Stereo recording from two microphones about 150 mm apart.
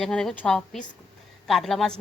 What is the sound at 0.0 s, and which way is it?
A woman's voice, 5° left (ahead or behind).